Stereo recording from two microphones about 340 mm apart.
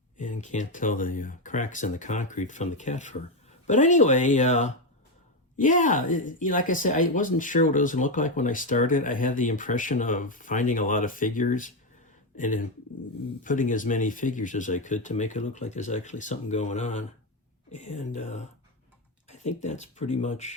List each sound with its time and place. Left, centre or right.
0.2 s speech: left